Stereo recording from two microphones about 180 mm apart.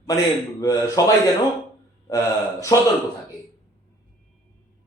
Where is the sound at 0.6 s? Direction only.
20° left (ahead or behind).